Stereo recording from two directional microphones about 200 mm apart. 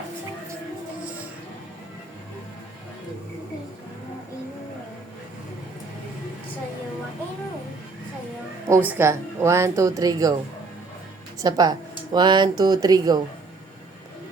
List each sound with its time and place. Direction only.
8.6 s speech: 10° right (ahead or behind)
11.3 s speech: 20° right (ahead or behind)